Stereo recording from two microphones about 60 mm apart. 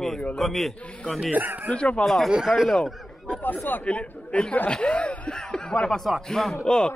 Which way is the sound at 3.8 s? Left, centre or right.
Left.